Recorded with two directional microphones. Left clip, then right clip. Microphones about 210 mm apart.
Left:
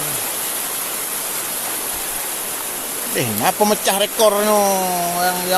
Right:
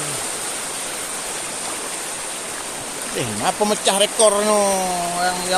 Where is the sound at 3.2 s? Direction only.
30° left (ahead or behind).